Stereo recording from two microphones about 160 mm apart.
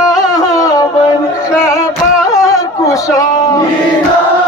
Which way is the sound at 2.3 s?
20° left (ahead or behind).